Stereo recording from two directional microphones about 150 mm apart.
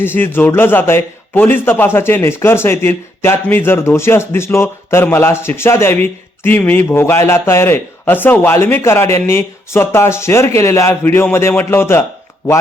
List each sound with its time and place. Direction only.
0.0 s a man's voice: 15° left (ahead or behind)